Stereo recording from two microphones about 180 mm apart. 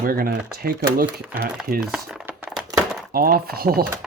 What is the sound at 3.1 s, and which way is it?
Speech, 55° right (ahead or behind).